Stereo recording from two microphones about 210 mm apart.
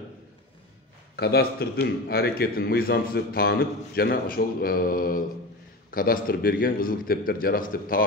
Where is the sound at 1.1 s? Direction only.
50° left (ahead or behind).